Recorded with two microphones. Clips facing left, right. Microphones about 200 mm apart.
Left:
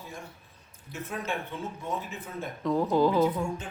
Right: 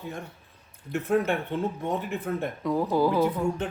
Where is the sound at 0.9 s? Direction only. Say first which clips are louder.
Right 10 dB; 60° right (ahead or behind).